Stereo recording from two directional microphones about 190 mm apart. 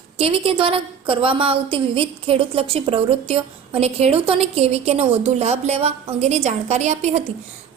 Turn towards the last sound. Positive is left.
turn(degrees=-35)  # may be behind; listen again after turning